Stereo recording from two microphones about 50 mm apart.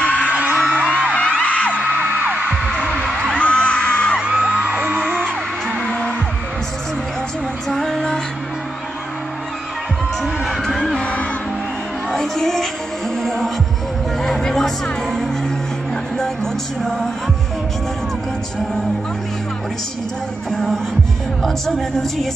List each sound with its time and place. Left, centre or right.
0.0 s music: left
0.3 s music: right
1.1 s music: left
1.9 s music: right
3.3 s music: left
4.2 s music: right
5.0 s music: centre
7.6 s music: centre
10.2 s crowd: centre
11.0 s music: left
12.1 s music: centre
20.5 s music: centre
21.4 s speech: centre